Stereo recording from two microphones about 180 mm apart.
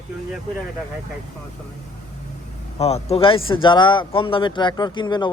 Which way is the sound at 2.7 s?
35° left (ahead or behind).